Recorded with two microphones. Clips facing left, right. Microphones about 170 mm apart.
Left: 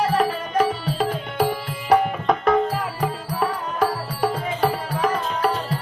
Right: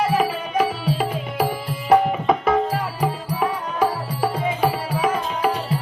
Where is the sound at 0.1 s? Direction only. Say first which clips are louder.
Even; 5° right (ahead or behind).